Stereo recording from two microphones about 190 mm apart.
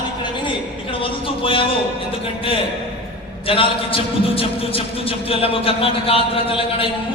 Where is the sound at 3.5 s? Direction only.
30° left (ahead or behind).